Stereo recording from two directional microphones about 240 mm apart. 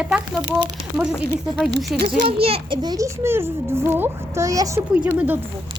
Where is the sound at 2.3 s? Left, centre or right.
Right.